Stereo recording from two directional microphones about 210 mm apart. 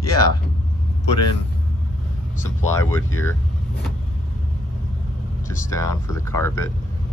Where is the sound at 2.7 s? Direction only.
15° left (ahead or behind).